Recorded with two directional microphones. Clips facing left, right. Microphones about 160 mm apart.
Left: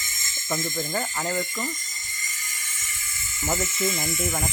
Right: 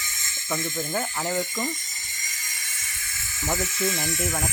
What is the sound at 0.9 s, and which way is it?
Speech, 5° right (ahead or behind).